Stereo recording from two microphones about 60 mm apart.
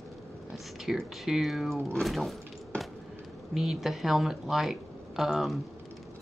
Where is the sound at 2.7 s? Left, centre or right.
Left.